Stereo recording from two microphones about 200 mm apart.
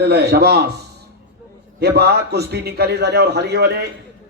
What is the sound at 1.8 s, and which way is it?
A man's voice, 55° right (ahead or behind).